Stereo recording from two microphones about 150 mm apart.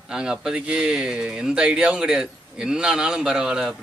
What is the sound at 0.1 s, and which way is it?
A man's voice, 5° right (ahead or behind).